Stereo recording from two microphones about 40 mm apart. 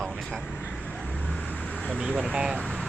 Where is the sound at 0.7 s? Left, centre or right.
Left.